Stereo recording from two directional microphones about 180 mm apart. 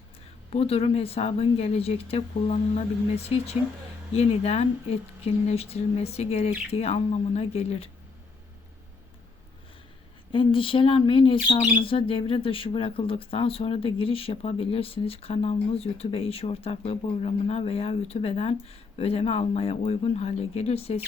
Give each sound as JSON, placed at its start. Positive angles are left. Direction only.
{"t": 0.5, "sound": "speech", "side_deg": 35}
{"t": 10.3, "sound": "speech", "side_deg": 30}